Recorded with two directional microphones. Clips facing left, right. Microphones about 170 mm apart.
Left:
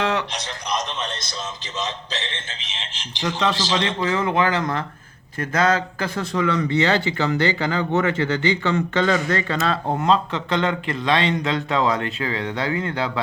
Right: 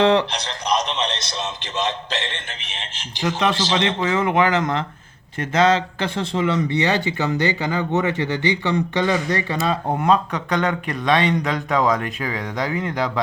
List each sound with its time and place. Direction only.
0.0 s speech: 30° right (ahead or behind)
0.4 s a man's voice: 75° right (ahead or behind); by 3.2 s 50° right (ahead or behind)
3.8 s speech: 25° right (ahead or behind)